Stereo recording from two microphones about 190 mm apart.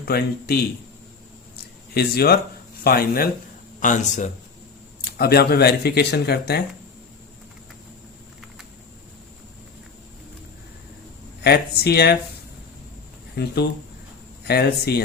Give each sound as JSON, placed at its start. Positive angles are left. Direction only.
{"t": 0.0, "sound": "a man's voice", "side_deg": 55}
{"t": 1.9, "sound": "a man's voice", "side_deg": 55}
{"t": 5.1, "sound": "speech", "side_deg": 55}
{"t": 11.4, "sound": "speech", "side_deg": 55}
{"t": 13.3, "sound": "speech", "side_deg": 60}